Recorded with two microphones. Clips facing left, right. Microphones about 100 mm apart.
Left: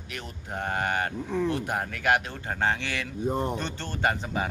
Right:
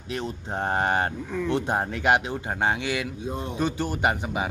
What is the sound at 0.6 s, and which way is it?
A man's voice, 30° right (ahead or behind).